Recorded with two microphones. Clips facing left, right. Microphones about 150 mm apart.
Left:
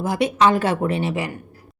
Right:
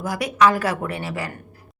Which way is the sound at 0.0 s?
25° left (ahead or behind).